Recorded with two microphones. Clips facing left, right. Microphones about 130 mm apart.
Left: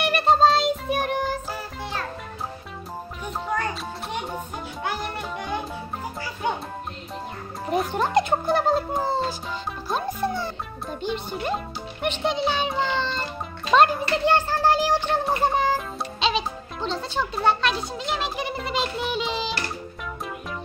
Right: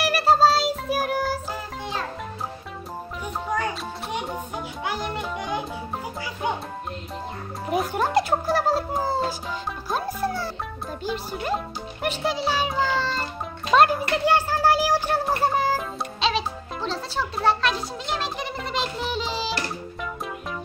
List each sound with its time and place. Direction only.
0.0 s music: 5° right (ahead or behind)
1.5 s music: 20° right (ahead or behind)
3.4 s music: 10° right (ahead or behind)
7.6 s music: 5° right (ahead or behind)
9.8 s a child's voice: 5° right (ahead or behind)